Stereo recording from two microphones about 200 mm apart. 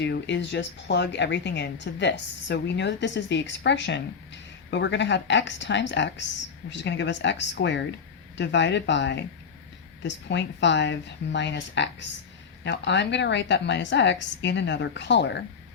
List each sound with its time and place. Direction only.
0.0 s speech: 60° left (ahead or behind)